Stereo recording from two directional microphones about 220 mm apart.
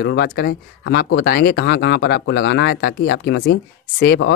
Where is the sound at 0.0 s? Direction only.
50° left (ahead or behind).